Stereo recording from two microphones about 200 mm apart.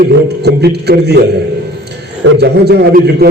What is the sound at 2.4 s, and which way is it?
Speech, 55° right (ahead or behind).